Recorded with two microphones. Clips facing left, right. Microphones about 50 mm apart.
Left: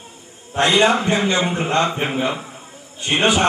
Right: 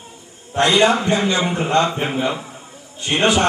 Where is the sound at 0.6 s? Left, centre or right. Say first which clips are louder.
Right 1 dB; centre.